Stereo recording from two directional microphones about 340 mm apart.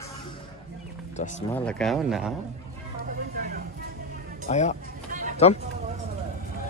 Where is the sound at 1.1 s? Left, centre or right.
Left.